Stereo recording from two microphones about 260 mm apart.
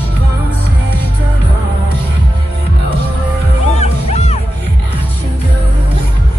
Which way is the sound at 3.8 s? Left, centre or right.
Left.